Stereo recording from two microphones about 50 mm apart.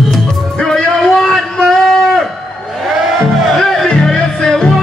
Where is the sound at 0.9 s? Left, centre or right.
Centre.